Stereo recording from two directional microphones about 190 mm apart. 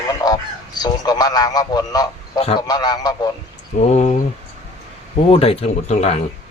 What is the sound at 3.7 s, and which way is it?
Speech, 40° left (ahead or behind).